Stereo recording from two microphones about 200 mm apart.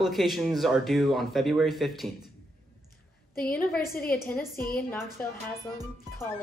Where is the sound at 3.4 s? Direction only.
5° left (ahead or behind).